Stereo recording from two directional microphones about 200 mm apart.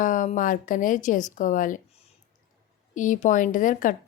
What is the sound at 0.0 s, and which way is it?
A woman's voice, 40° left (ahead or behind).